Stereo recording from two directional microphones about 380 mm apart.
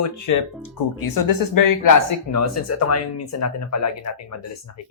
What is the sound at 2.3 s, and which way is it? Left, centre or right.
Speech, left.